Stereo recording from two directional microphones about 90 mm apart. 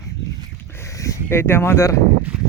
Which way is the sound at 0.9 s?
35° left (ahead or behind).